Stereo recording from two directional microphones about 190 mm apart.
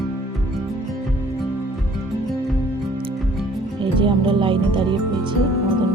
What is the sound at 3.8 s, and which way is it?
Music, 25° right (ahead or behind).